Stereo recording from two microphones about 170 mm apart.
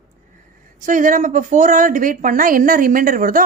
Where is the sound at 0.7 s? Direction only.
50° right (ahead or behind).